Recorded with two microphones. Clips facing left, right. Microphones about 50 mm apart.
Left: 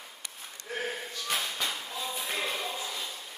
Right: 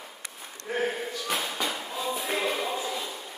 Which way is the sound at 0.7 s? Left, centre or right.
Centre.